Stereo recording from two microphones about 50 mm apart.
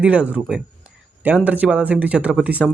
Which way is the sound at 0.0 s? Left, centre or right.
Right.